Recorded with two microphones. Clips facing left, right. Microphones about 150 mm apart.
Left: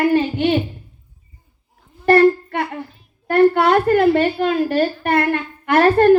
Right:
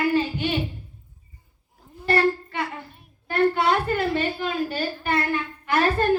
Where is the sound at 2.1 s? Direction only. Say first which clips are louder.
Left 9 dB; 60° left (ahead or behind).